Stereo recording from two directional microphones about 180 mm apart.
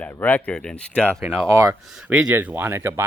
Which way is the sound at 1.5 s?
15° right (ahead or behind).